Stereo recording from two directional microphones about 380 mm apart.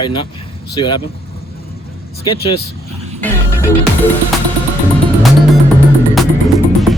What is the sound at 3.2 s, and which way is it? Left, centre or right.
Music, centre.